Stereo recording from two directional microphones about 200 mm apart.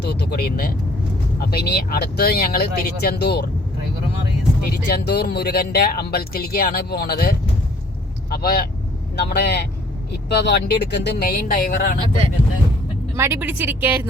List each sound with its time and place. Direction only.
0.0 s speech: 55° left (ahead or behind)
4.9 s speech: 55° left (ahead or behind)
11.9 s speech: 30° right (ahead or behind)
13.1 s speech: 10° right (ahead or behind)